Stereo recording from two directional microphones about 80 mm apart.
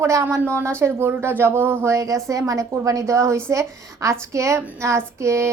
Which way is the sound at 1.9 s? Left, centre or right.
Right.